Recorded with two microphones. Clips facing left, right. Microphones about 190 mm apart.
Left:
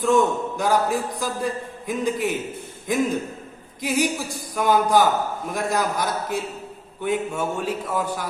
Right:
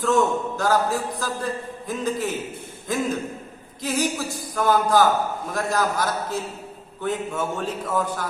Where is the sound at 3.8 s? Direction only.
10° left (ahead or behind).